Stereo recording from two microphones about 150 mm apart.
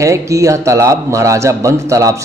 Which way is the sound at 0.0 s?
20° right (ahead or behind).